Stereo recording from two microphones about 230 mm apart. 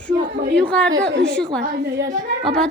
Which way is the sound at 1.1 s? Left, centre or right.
Right.